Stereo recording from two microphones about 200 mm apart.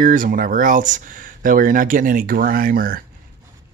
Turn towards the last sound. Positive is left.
turn(degrees=-45)  # may be behind; listen again after turning